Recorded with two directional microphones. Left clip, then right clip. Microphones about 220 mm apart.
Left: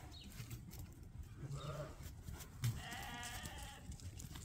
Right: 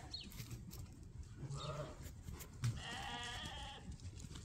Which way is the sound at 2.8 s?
35° right (ahead or behind).